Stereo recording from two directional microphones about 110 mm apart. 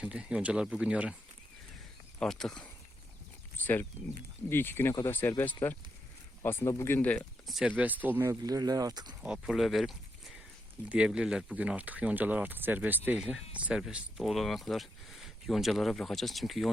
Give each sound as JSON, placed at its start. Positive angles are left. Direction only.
{"t": 0.0, "sound": "speech", "side_deg": -10}
{"t": 2.1, "sound": "speech", "side_deg": 5}
{"t": 3.6, "sound": "speech", "side_deg": 15}
{"t": 7.4, "sound": "speech", "side_deg": 0}
{"t": 7.7, "sound": "speech", "side_deg": -15}
{"t": 8.3, "sound": "speech", "side_deg": -35}
{"t": 9.2, "sound": "speech", "side_deg": -5}
{"t": 13.8, "sound": "speech", "side_deg": 0}